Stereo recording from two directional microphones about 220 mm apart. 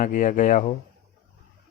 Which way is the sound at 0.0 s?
35° left (ahead or behind).